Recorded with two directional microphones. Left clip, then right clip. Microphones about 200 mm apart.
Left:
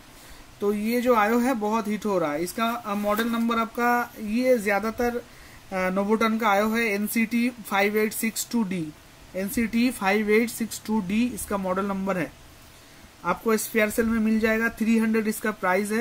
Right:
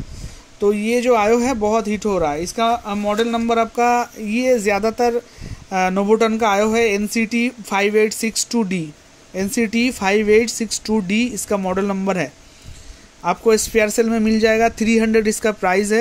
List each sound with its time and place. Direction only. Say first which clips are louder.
0.6 s speech: right 8 dB; 25° right (ahead or behind)